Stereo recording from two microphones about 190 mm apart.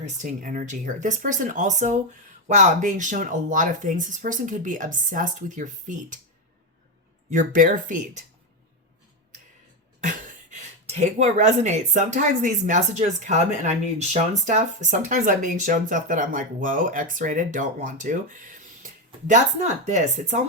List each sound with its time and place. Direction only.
0.2 s speech: 45° right (ahead or behind)
7.3 s speech: 45° right (ahead or behind)
10.1 s speech: 40° right (ahead or behind)